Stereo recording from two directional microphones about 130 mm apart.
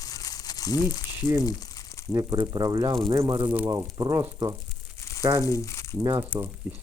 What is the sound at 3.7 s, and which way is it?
Speech, 30° right (ahead or behind).